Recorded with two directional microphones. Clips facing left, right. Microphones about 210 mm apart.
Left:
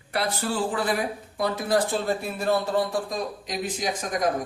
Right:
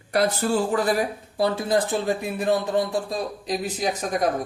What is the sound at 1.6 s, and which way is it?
Speech, 20° right (ahead or behind).